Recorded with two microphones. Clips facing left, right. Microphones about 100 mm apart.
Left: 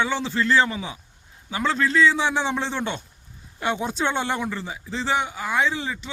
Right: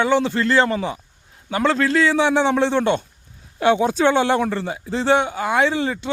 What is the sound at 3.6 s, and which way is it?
A man's voice, 85° right.